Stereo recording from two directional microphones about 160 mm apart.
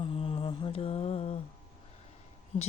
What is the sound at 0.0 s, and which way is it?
Mantra, 35° left (ahead or behind).